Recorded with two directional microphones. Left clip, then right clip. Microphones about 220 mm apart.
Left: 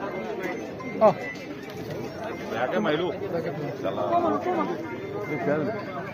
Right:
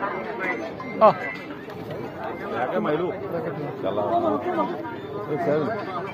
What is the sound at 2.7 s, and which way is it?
Speech, 25° right (ahead or behind).